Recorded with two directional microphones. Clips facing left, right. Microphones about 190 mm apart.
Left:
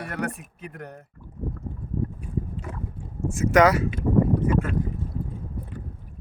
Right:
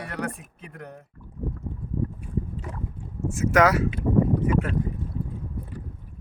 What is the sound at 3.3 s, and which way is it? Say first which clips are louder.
Speech: left 2 dB; 5° right (ahead or behind).